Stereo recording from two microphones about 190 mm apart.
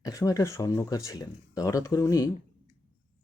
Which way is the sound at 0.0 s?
20° left (ahead or behind).